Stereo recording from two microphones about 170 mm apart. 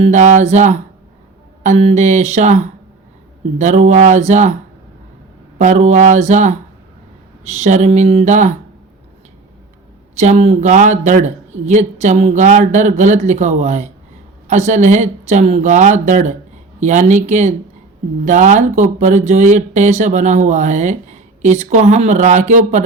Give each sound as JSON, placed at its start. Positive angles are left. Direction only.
{"t": 0.0, "sound": "speech", "side_deg": -45}
{"t": 5.5, "sound": "speech", "side_deg": -45}
{"t": 10.2, "sound": "speech", "side_deg": -40}